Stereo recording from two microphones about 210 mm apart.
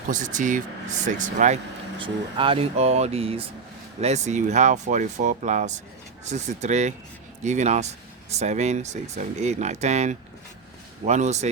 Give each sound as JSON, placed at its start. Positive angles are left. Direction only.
{"t": 0.1, "sound": "speech", "side_deg": -40}
{"t": 2.0, "sound": "speech", "side_deg": -25}